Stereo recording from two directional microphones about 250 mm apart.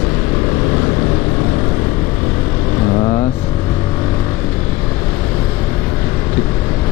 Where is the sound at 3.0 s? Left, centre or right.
Left.